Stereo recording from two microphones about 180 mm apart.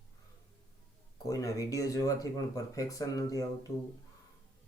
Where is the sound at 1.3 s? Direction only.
20° left (ahead or behind).